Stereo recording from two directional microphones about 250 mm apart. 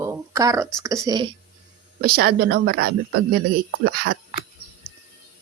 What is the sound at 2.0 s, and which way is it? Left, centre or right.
Speech, right.